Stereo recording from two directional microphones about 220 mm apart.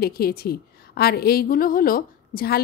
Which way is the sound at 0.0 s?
45° left (ahead or behind).